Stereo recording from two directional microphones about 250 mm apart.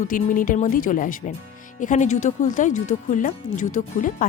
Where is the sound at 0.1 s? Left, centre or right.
Left.